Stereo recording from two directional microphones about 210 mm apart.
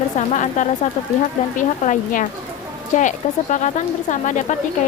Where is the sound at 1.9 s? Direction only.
40° left (ahead or behind).